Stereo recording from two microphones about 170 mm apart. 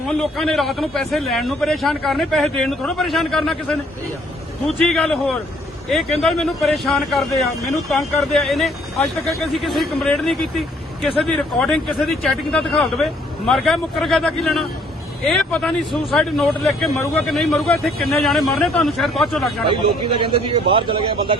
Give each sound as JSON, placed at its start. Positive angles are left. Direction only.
{"t": 0.1, "sound": "a man's voice", "side_deg": 0}
{"t": 4.8, "sound": "a man's voice", "side_deg": 5}
{"t": 19.6, "sound": "speech", "side_deg": -30}